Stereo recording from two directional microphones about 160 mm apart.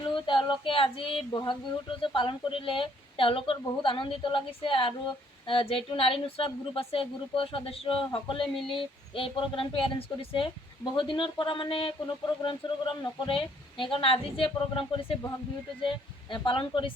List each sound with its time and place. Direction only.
0.3 s child singing: 30° left (ahead or behind)